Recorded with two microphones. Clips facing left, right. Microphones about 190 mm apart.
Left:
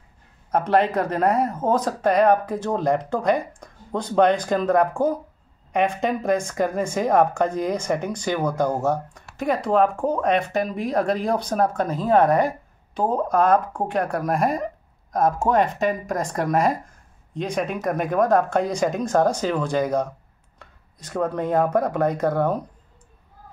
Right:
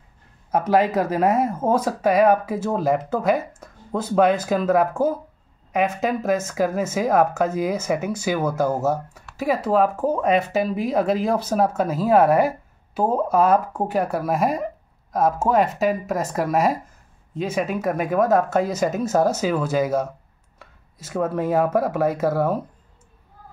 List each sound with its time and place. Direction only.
0.5 s a woman's voice: 10° right (ahead or behind)